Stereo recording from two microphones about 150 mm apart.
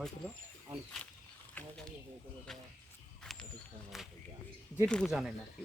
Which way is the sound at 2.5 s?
Centre (ahead or behind).